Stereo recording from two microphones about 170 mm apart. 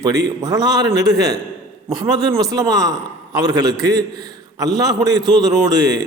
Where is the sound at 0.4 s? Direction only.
20° right (ahead or behind).